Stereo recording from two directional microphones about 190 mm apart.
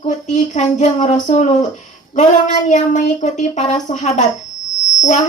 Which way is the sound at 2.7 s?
40° left (ahead or behind).